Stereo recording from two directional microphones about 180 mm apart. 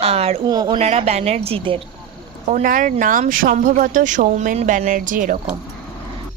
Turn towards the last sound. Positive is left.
turn(degrees=-50)  # may be behind; listen again after turning